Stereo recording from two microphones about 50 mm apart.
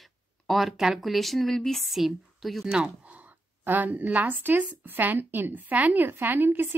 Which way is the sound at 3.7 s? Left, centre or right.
Right.